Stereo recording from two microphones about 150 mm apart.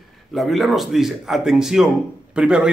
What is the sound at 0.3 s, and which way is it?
Speech, centre (ahead or behind).